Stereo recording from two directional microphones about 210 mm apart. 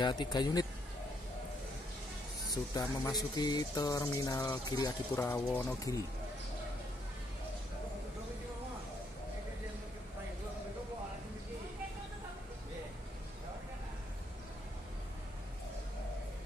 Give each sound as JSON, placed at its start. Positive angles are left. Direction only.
{"t": 0.0, "sound": "speech", "side_deg": 20}
{"t": 2.5, "sound": "speech", "side_deg": 15}